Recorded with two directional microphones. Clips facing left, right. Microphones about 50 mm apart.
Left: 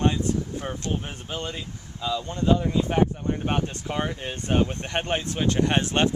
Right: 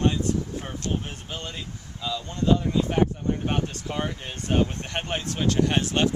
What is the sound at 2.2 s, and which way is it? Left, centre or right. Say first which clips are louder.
Speech: even; left.